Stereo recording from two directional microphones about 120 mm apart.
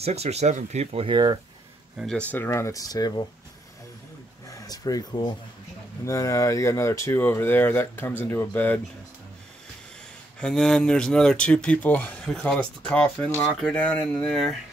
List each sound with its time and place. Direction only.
0.0 s speech: 60° right (ahead or behind)
1.0 s speech: 40° right (ahead or behind)
2.0 s speech: 10° left (ahead or behind); by 3.2 s 30° left (ahead or behind)
4.5 s speech: 30° left (ahead or behind)
10.4 s speech: 5° left (ahead or behind)